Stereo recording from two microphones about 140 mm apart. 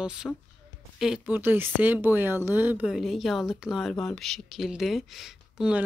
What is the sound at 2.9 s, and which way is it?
A woman's voice, centre (ahead or behind).